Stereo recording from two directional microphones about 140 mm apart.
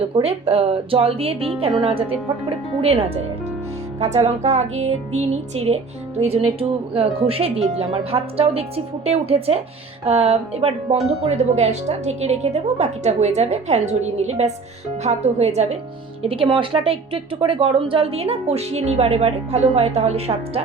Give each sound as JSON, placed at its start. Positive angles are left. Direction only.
{"t": 0.1, "sound": "a woman's voice", "side_deg": -40}
{"t": 4.0, "sound": "a woman's voice", "side_deg": -50}
{"t": 16.2, "sound": "a woman's voice", "side_deg": -40}